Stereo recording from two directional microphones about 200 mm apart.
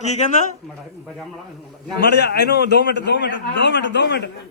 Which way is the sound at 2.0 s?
60° left (ahead or behind).